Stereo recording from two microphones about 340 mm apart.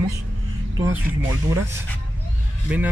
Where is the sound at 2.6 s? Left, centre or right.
Centre.